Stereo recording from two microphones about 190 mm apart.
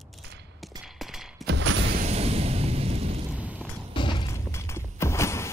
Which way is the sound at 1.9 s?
35° right (ahead or behind).